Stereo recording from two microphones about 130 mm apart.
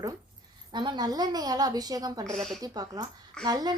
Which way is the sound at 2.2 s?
5° left (ahead or behind).